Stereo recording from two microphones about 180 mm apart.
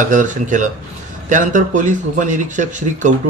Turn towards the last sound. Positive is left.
turn(degrees=-45)  # may be behind; listen again after turning